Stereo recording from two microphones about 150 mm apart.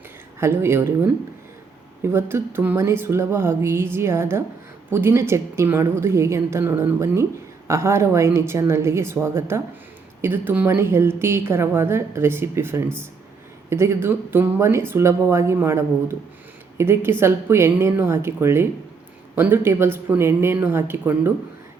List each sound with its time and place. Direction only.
0.3 s a woman's voice: 15° right (ahead or behind)
2.0 s a woman's voice: 15° right (ahead or behind)